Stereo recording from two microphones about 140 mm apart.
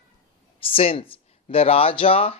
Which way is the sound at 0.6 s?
40° left (ahead or behind).